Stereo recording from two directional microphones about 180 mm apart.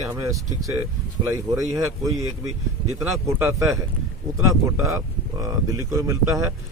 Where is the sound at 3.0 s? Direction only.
15° right (ahead or behind).